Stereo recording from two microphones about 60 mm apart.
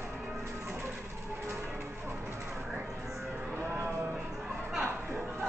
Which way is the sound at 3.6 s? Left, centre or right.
Right.